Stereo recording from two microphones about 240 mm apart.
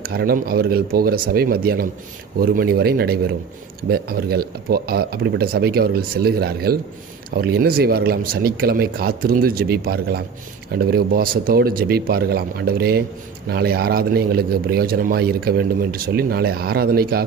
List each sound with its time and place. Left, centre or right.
0.0 s a man's voice: right